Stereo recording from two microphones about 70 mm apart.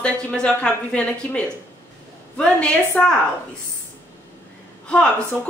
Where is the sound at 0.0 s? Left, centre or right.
Centre.